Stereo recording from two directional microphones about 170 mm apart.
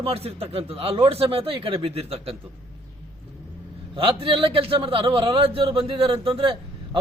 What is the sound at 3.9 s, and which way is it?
A man's voice, 30° right (ahead or behind).